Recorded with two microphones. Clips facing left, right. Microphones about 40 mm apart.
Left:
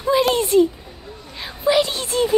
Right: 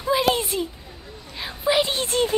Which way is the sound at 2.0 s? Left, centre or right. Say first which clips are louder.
Left 2 dB; right.